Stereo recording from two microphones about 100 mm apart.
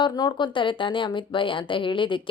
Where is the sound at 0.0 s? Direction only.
45° left (ahead or behind).